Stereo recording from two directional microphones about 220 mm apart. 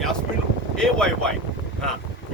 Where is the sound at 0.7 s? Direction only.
5° left (ahead or behind).